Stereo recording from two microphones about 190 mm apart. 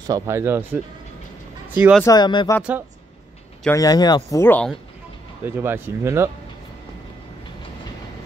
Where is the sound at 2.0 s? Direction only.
20° left (ahead or behind).